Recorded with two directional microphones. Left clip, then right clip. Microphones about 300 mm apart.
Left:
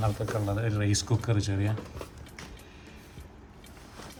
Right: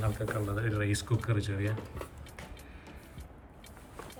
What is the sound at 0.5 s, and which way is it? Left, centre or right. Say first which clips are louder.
Speech: left 3 dB; centre.